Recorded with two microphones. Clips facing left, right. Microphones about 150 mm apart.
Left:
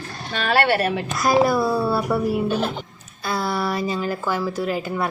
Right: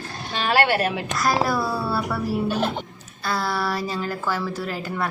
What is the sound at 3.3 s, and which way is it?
A woman's voice, 20° left (ahead or behind).